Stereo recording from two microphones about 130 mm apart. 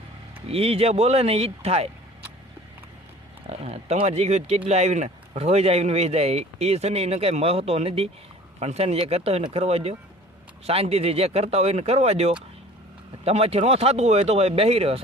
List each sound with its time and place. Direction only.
0.4 s speech: 50° right (ahead or behind)
3.5 s speech: 55° right (ahead or behind)